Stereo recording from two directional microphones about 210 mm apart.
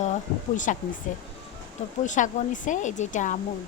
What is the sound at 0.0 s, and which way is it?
Speech, 35° left (ahead or behind).